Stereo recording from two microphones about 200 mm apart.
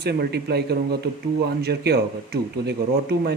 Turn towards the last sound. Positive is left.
turn(degrees=-55)  # may be behind; listen again after turning